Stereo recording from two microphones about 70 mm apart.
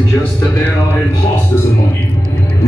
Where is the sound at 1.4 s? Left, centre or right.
Left.